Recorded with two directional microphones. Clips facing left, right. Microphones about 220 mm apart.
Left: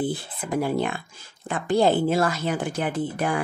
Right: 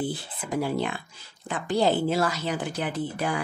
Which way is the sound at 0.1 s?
50° left (ahead or behind).